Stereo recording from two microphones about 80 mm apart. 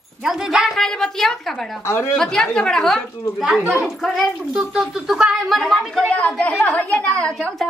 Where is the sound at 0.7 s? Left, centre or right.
Centre.